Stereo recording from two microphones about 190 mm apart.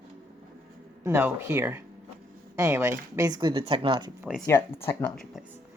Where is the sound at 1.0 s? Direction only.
10° right (ahead or behind).